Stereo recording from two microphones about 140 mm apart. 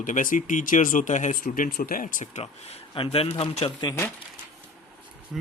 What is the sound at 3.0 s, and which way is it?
Speech, 45° left (ahead or behind).